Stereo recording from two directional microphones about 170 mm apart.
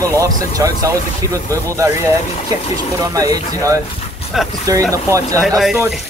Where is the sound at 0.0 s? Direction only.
20° right (ahead or behind).